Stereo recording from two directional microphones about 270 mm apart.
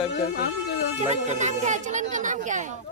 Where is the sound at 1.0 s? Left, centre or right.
Right.